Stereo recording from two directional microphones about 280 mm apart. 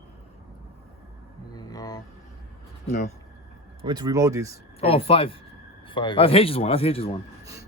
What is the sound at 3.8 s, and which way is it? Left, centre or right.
Speech, centre.